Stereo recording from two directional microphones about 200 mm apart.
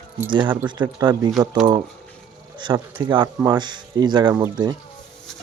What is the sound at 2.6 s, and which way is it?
Speech, 25° right (ahead or behind).